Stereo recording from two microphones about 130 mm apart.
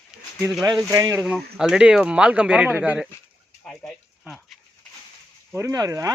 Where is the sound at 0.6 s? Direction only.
25° right (ahead or behind).